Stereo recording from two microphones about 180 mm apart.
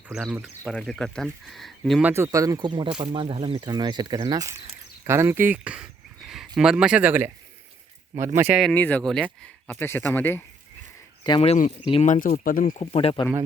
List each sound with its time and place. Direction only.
0.1 s speech: 5° right (ahead or behind); by 4.5 s 20° right (ahead or behind)
5.0 s a sound: 15° right (ahead or behind)
6.6 s speech: 5° right (ahead or behind)
8.6 s speech: 10° left (ahead or behind)
9.7 s speech: 15° left (ahead or behind)
11.2 s speech: 30° left (ahead or behind); by 12.7 s 50° left (ahead or behind)
12.8 s speech: 35° left (ahead or behind)